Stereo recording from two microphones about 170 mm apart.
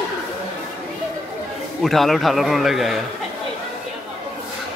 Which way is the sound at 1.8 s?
Centre (ahead or behind).